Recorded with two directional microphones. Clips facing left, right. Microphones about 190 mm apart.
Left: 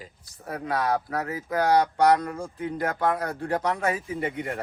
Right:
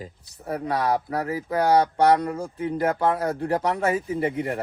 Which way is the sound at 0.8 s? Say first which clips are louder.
Right 2 dB; 30° right (ahead or behind).